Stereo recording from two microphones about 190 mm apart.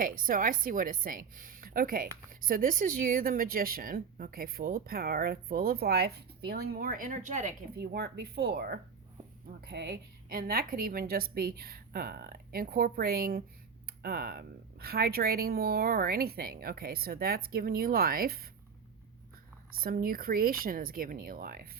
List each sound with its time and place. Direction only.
0.0 s a woman's voice: 45° right (ahead or behind)
7.8 s a woman's voice: 60° right (ahead or behind)
19.8 s a woman's voice: 50° right (ahead or behind)